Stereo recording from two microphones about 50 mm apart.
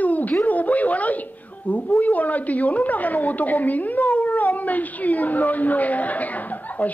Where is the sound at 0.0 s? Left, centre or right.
Left.